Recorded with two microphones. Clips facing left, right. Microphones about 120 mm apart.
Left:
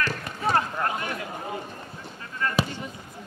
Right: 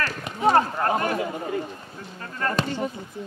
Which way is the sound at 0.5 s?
40° right (ahead or behind).